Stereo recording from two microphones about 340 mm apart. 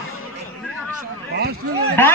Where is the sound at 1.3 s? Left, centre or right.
Right.